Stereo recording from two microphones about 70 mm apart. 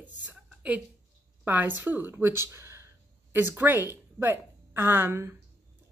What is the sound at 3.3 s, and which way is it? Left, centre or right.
Speech, right.